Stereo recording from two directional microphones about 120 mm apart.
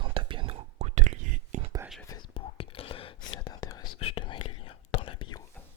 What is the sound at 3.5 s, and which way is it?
Whispering, 30° left (ahead or behind).